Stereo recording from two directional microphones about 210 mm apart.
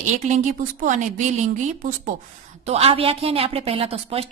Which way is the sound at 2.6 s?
30° right (ahead or behind).